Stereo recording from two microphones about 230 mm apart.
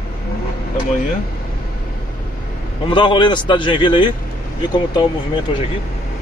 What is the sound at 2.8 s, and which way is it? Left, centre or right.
Speech, left.